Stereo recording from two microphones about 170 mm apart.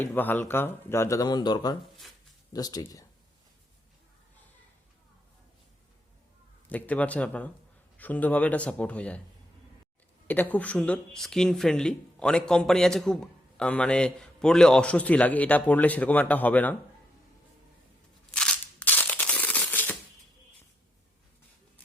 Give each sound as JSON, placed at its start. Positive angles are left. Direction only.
{"t": 0.0, "sound": "speech", "side_deg": 10}
{"t": 6.7, "sound": "speech", "side_deg": 10}
{"t": 10.2, "sound": "speech", "side_deg": 10}
{"t": 18.3, "sound": "a sound", "side_deg": 5}